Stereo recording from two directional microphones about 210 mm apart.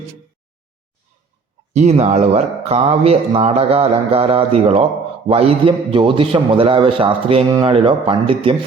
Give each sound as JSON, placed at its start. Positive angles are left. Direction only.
{"t": 1.7, "sound": "speech", "side_deg": -35}